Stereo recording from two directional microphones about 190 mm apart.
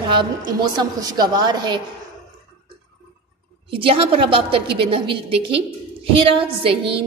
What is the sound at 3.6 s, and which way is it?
A woman's voice, 30° right (ahead or behind).